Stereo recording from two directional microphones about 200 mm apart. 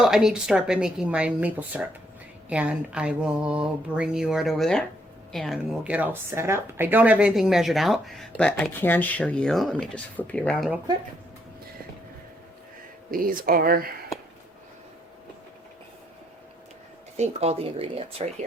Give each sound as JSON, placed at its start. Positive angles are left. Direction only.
{"t": 0.0, "sound": "a woman's voice", "side_deg": 0}
{"t": 13.1, "sound": "speech", "side_deg": -45}
{"t": 17.2, "sound": "speech", "side_deg": -30}